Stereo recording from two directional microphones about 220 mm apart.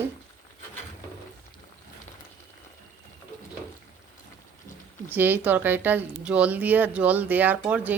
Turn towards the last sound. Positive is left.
turn(degrees=-5)  # may be behind; listen again after turning